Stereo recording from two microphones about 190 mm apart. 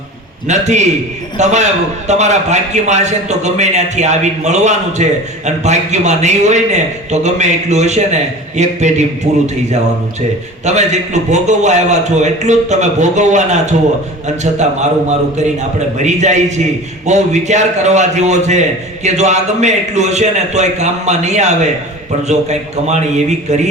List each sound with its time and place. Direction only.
0.4 s a man's voice: 35° right (ahead or behind)